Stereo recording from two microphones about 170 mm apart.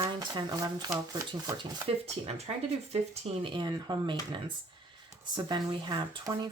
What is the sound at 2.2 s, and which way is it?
Speech, 40° right (ahead or behind).